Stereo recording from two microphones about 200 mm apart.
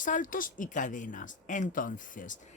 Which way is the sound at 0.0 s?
40° left (ahead or behind).